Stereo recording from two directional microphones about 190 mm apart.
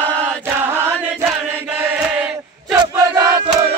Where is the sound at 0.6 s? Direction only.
10° right (ahead or behind).